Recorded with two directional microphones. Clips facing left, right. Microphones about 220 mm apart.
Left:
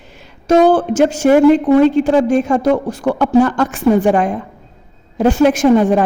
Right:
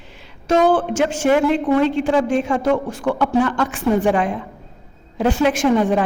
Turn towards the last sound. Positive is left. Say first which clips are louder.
# left 5 dB
turn(degrees=45)  # may be behind; listen again after turning